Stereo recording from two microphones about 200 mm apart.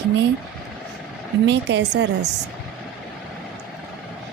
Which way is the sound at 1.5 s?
60° right (ahead or behind).